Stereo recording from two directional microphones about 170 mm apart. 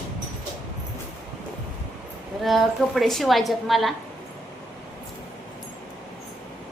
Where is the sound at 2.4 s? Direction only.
Centre (ahead or behind).